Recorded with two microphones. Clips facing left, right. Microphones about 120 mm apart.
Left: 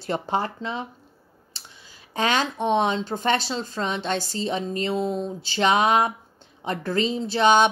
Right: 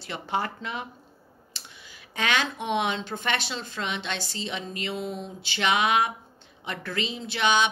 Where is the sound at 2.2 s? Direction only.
35° left (ahead or behind).